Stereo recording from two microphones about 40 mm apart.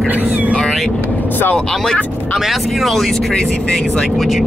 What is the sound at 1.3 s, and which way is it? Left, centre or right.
Speech, left.